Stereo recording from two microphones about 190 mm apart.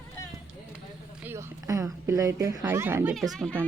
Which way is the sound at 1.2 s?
10° right (ahead or behind).